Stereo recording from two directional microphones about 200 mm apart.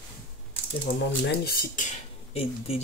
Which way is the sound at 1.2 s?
50° left (ahead or behind).